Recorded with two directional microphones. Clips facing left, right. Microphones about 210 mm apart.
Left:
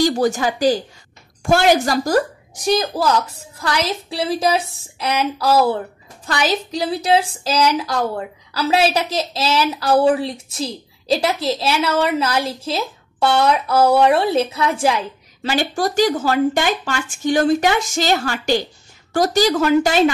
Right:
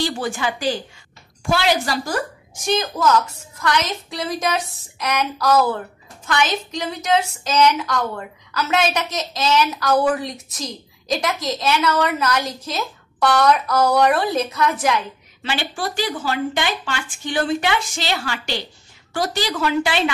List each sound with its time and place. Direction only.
0.0 s a woman's voice: 40° left (ahead or behind)